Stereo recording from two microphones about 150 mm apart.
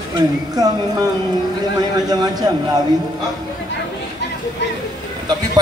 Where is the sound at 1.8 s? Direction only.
25° right (ahead or behind).